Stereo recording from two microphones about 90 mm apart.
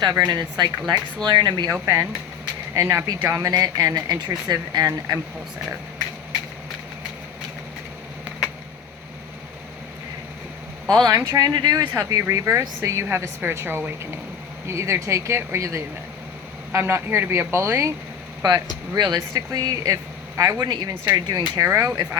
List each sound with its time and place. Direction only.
0.3 s speech: 50° right (ahead or behind)
2.7 s speech: 35° right (ahead or behind)
10.9 s speech: 45° right (ahead or behind)
18.4 s speech: 55° right (ahead or behind)
19.3 s speech: 40° right (ahead or behind)